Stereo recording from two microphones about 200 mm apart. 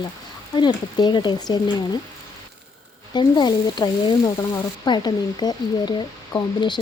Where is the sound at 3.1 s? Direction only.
20° left (ahead or behind).